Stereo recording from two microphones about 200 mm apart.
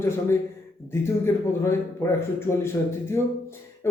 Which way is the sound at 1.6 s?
15° left (ahead or behind).